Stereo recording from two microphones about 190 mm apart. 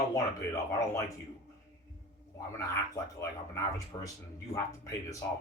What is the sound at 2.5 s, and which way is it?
A man's voice, 15° left (ahead or behind).